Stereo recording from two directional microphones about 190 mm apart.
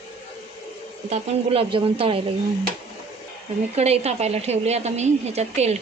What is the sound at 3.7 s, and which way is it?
A woman's voice, 35° right (ahead or behind).